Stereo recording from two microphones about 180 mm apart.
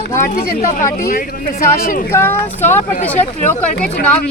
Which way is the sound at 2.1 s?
10° left (ahead or behind).